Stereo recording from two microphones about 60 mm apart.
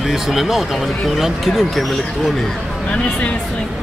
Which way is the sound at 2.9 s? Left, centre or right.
Centre.